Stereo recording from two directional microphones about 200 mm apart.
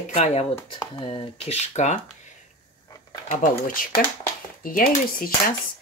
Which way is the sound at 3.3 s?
40° left (ahead or behind).